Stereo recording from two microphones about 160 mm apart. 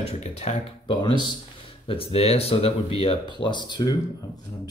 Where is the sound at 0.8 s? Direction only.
30° left (ahead or behind).